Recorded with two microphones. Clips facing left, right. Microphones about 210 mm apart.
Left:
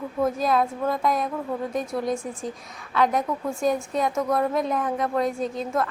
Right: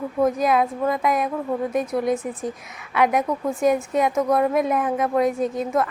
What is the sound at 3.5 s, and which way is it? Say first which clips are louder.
Speech: right 5 dB; 20° right (ahead or behind).